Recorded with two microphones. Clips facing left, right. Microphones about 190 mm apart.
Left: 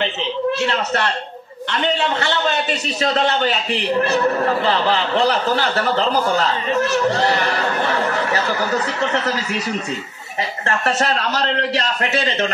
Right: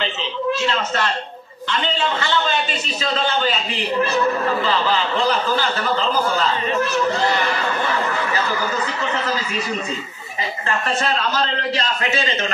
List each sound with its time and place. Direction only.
0.6 s a man's voice: 65° left (ahead or behind)
10.9 s a man's voice: 70° left (ahead or behind)